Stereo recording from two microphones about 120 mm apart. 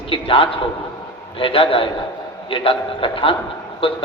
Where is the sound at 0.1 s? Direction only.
45° left (ahead or behind).